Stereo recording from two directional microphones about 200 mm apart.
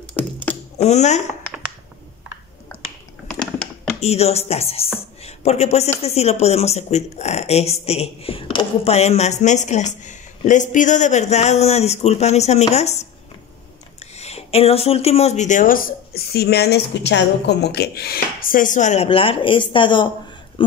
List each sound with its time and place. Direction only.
0.1 s computer keyboard: 10° left (ahead or behind)
0.7 s speech: 35° left (ahead or behind)
4.0 s speech: 30° left (ahead or behind)
14.1 s speech: 30° left (ahead or behind)